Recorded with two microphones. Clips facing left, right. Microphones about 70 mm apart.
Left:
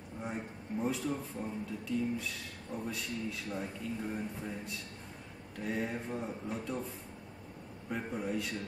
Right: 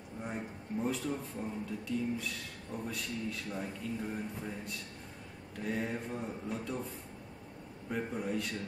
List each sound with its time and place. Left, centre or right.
0.2 s speech: centre
7.9 s speech: centre